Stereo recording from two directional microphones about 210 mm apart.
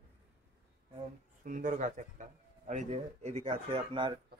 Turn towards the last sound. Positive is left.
turn(degrees=-20)  # may be behind; listen again after turning